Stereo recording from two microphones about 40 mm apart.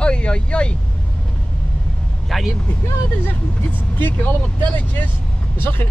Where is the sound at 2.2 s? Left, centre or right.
Centre.